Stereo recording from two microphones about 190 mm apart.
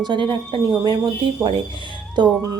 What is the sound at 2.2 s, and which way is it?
Speech, 20° right (ahead or behind).